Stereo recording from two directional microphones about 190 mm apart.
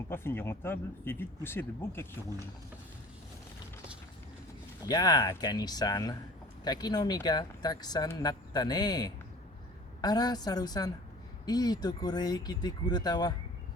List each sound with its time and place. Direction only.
0.1 s speech: 10° left (ahead or behind)
4.9 s speech: 20° left (ahead or behind)